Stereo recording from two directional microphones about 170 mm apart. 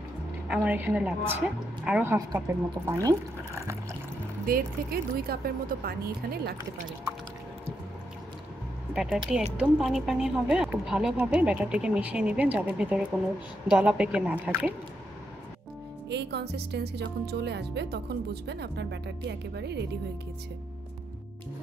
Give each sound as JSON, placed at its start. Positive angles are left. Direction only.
{"t": 0.5, "sound": "speech", "side_deg": -10}
{"t": 4.5, "sound": "speech", "side_deg": -55}
{"t": 8.9, "sound": "speech", "side_deg": 0}
{"t": 16.1, "sound": "speech", "side_deg": -85}